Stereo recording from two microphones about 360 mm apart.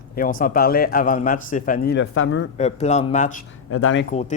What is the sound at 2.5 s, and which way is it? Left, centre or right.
Speech, centre.